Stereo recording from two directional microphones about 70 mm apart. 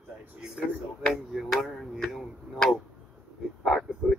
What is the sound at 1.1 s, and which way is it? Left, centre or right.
Speech, centre.